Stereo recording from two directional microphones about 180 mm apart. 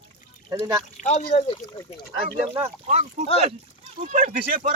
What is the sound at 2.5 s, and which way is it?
A man's voice, 40° right (ahead or behind).